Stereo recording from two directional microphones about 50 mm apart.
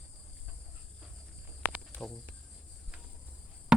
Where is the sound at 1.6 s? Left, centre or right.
Right.